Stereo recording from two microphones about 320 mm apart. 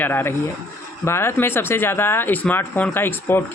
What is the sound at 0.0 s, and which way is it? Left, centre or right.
Speech, centre.